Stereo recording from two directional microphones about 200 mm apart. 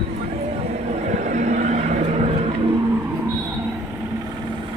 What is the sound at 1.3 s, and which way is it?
Vehicle, 35° right (ahead or behind).